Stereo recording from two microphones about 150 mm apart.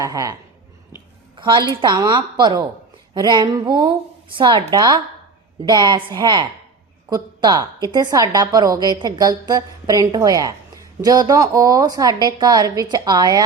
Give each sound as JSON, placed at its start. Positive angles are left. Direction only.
{"t": 0.0, "sound": "a woman's voice", "side_deg": -20}
{"t": 1.4, "sound": "a woman's voice", "side_deg": -30}